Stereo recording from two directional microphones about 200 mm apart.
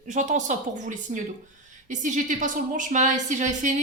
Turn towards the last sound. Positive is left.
turn(degrees=-40)  # may be behind; listen again after turning